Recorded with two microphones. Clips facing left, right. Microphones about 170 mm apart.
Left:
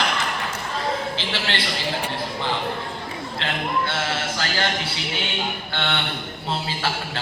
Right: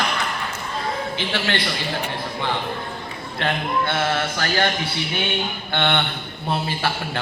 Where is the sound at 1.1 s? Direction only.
55° right (ahead or behind).